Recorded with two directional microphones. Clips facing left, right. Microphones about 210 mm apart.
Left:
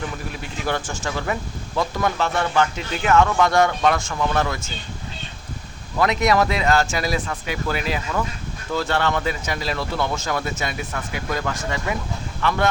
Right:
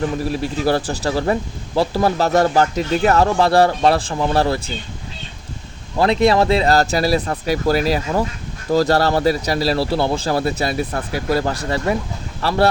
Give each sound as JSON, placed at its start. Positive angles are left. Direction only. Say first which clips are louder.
{"t": 0.3, "sound": "speech", "louder": "right 7 dB", "side_deg": -35}
{"t": 6.0, "sound": "speech", "louder": "right 4 dB", "side_deg": -30}